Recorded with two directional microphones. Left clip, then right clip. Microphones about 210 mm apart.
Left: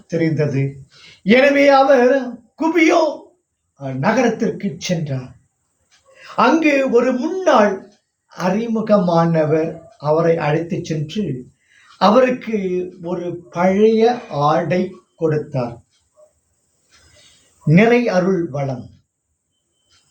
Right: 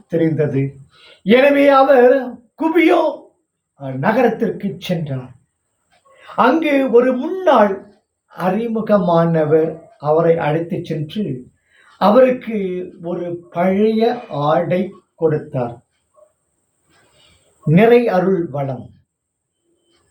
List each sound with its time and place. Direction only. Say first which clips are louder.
0.1 s a man's voice: right 2 dB; centre (ahead or behind)
6.2 s a man's voice: even; 10° left (ahead or behind)
17.7 s a man's voice: right 3 dB; centre (ahead or behind)